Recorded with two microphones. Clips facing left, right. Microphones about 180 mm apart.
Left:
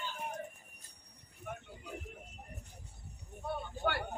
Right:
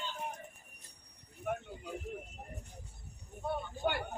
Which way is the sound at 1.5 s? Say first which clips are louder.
Right 8 dB; 60° right (ahead or behind).